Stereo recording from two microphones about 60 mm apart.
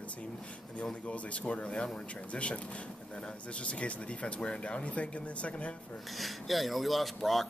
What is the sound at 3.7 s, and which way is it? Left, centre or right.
Speech, centre.